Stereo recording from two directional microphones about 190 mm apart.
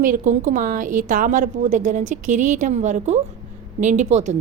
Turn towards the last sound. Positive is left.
turn(degrees=-35)  # may be behind; listen again after turning